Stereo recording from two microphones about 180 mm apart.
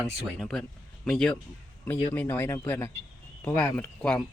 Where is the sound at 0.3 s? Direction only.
5° left (ahead or behind).